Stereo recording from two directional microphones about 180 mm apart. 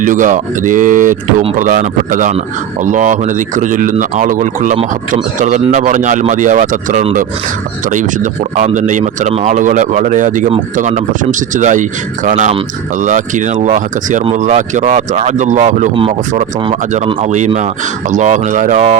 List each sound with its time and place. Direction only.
0.0 s speech: 45° right (ahead or behind)